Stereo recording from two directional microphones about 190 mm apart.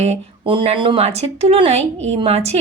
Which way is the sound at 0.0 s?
30° right (ahead or behind).